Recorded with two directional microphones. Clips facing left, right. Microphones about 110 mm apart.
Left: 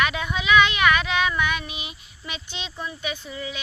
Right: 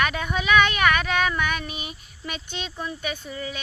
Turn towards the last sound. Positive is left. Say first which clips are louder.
# even
turn(degrees=-40)  # may be behind; listen again after turning